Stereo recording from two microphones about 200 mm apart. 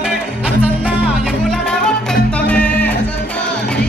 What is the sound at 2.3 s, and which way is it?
Music, 5° left (ahead or behind).